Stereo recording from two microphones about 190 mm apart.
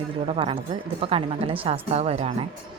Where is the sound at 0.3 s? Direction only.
30° right (ahead or behind).